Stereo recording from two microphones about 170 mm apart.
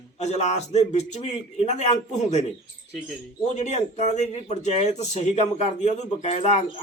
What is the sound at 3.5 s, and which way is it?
A man's voice, 40° left (ahead or behind).